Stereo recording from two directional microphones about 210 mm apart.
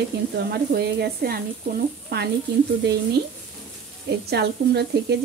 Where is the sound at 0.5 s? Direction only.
50° right (ahead or behind).